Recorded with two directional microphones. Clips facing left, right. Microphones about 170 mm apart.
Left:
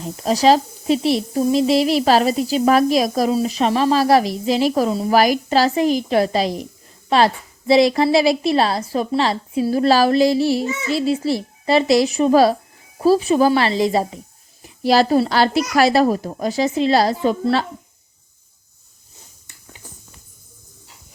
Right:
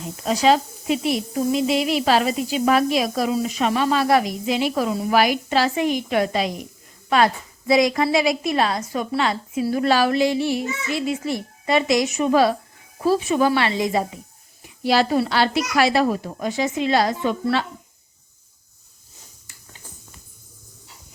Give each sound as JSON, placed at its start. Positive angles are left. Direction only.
{"t": 0.3, "sound": "speech", "side_deg": 35}